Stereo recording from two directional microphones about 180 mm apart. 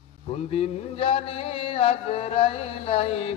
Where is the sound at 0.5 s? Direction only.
35° left (ahead or behind).